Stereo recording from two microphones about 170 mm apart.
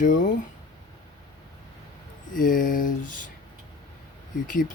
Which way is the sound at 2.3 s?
55° left (ahead or behind).